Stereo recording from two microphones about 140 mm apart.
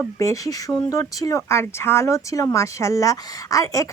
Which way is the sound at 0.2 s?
25° left (ahead or behind).